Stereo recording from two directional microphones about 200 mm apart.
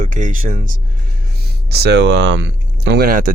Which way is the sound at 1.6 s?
55° right (ahead or behind).